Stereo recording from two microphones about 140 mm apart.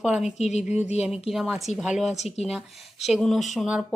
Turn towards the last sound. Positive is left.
turn(degrees=0)  # may be behind; listen again after turning